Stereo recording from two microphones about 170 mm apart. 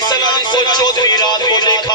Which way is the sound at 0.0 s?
25° left (ahead or behind).